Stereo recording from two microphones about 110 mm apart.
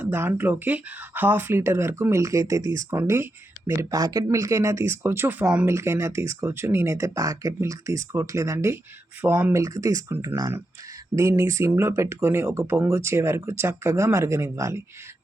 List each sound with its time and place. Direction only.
0.0 s speech: 20° right (ahead or behind)